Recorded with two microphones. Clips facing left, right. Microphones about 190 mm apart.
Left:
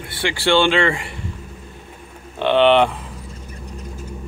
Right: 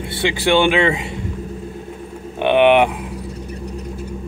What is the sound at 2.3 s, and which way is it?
Bird, 15° right (ahead or behind).